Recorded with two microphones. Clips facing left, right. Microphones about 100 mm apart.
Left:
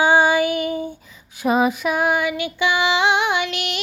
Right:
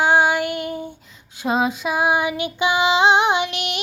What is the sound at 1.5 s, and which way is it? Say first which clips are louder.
Female singing: left 1 dB; 15° right (ahead or behind).